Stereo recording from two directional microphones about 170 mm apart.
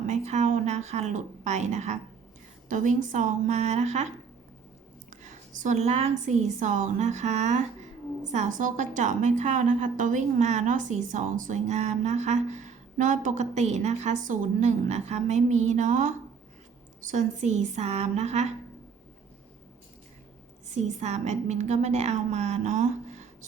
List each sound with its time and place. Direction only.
0.1 s a woman's voice: 40° right (ahead or behind)
5.5 s a woman's voice: 45° right (ahead or behind)
20.7 s a woman's voice: 40° right (ahead or behind)